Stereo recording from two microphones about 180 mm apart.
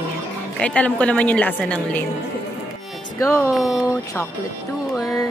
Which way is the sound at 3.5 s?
Centre (ahead or behind).